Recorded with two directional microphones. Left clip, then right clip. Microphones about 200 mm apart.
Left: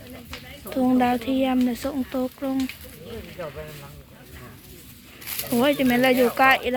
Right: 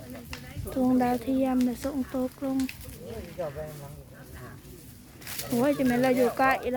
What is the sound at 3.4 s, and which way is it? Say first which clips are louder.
Speech: right 1 dB; 40° left (ahead or behind).